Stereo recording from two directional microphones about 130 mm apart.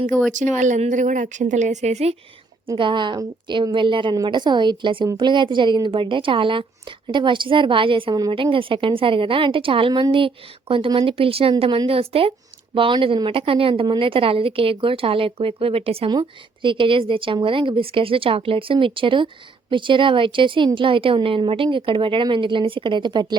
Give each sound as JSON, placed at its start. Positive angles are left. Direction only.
{"t": 0.3, "sound": "a woman's voice", "side_deg": -75}
{"t": 2.7, "sound": "a woman's voice", "side_deg": -40}